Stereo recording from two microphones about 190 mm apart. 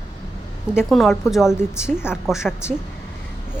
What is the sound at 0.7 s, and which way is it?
A woman's voice, centre (ahead or behind).